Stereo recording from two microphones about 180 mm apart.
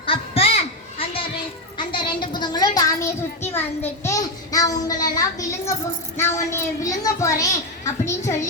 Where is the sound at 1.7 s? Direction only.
25° left (ahead or behind).